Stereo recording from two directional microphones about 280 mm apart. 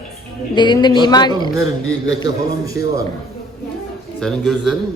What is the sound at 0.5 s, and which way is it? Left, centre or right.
Speech, centre.